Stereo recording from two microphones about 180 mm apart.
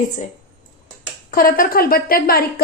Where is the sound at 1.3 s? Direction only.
55° left (ahead or behind).